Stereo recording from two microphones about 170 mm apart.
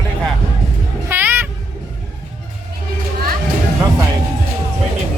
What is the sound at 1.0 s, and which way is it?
Meow, 10° right (ahead or behind).